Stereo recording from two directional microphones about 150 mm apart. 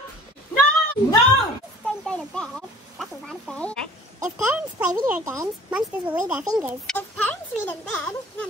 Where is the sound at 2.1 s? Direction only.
5° left (ahead or behind).